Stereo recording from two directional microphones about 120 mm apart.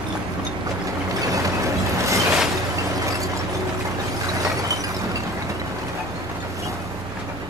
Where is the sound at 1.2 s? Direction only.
25° right (ahead or behind).